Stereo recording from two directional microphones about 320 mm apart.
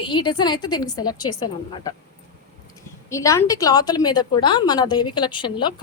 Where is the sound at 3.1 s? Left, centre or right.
Centre.